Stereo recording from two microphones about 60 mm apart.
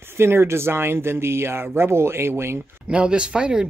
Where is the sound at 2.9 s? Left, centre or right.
Centre.